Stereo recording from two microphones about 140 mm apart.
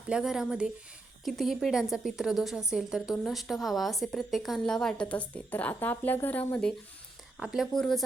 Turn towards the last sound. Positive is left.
turn(degrees=5)  # may be behind; listen again after turning